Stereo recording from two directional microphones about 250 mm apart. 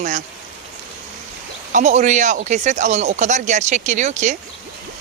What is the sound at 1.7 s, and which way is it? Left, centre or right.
Speech, right.